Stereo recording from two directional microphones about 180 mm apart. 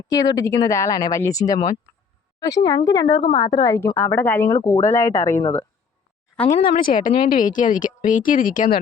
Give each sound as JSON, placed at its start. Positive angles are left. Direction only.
{"t": 0.1, "sound": "speech", "side_deg": 20}
{"t": 6.5, "sound": "speech", "side_deg": 55}